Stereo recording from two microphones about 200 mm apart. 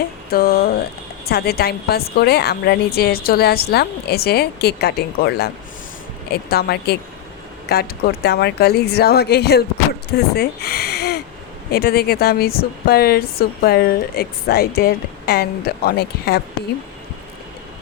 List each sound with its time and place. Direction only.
0.3 s speech: 50° left (ahead or behind)